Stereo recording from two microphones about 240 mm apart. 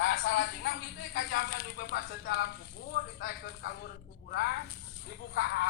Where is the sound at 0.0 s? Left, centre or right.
Left.